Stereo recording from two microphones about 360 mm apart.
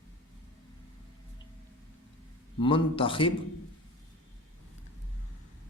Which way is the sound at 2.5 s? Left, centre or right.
Centre.